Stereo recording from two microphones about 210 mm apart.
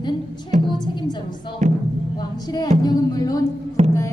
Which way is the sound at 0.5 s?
35° right (ahead or behind).